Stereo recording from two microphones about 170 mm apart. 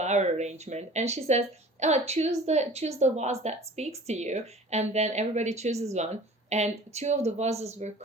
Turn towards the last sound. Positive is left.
turn(degrees=-40)  # may be behind; listen again after turning